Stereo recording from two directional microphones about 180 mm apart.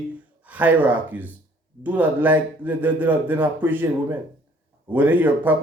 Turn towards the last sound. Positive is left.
turn(degrees=-10)  # may be behind; listen again after turning